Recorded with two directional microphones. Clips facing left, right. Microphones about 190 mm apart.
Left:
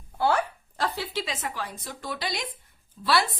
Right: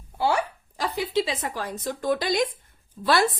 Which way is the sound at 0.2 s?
10° right (ahead or behind).